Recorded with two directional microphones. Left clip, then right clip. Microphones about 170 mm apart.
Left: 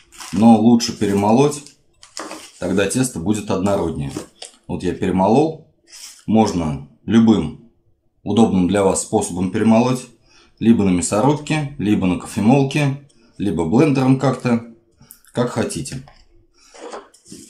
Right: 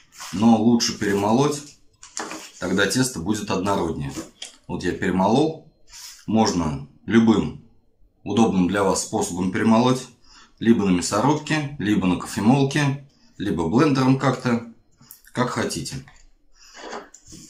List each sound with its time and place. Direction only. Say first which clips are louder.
0.4 s speech: left 5 dB; 20° left (ahead or behind)
2.6 s speech: left 2 dB; 20° left (ahead or behind)